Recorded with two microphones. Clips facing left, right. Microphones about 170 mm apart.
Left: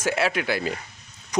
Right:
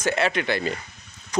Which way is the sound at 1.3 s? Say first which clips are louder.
Even; 15° left (ahead or behind).